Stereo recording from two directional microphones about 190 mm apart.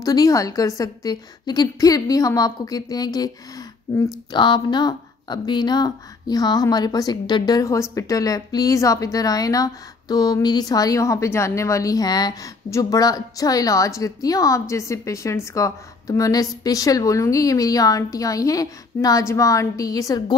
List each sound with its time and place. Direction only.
0.0 s speech: 20° left (ahead or behind)